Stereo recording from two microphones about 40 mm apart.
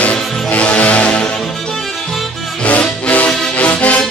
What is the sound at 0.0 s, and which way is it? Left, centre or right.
Music, left.